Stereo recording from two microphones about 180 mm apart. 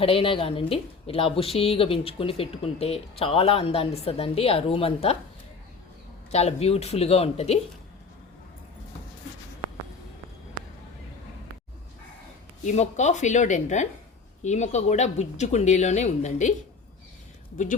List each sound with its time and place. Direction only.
0.0 s a woman's voice: 30° left (ahead or behind)
6.3 s a woman's voice: 35° left (ahead or behind)
12.6 s a woman's voice: 40° left (ahead or behind)